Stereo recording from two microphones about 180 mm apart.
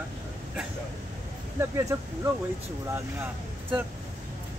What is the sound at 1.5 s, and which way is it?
Speech, 15° right (ahead or behind).